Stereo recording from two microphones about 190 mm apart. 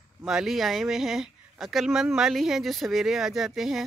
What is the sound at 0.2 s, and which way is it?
Speech, 5° right (ahead or behind).